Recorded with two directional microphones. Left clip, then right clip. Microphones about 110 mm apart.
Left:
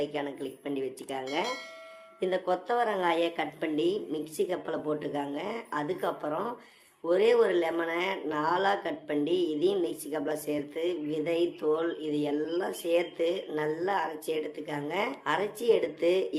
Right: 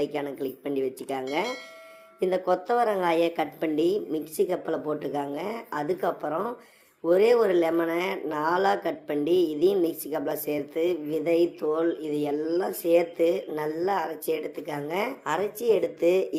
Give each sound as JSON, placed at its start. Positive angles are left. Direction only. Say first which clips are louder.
{"t": 0.0, "sound": "speech", "louder": "right 4 dB", "side_deg": -35}
{"t": 2.2, "sound": "speech", "louder": "right 4 dB", "side_deg": -40}
{"t": 15.2, "sound": "speech", "louder": "right 2 dB", "side_deg": -20}